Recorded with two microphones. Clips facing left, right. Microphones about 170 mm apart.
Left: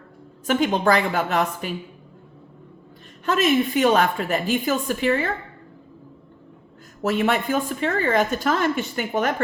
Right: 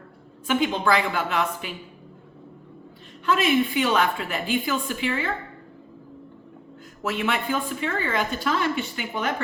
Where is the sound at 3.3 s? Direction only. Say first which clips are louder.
Left 2 dB; 45° left (ahead or behind).